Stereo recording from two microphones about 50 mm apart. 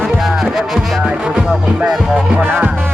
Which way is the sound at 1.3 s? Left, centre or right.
Centre.